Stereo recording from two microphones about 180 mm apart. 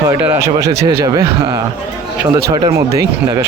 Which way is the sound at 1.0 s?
25° right (ahead or behind).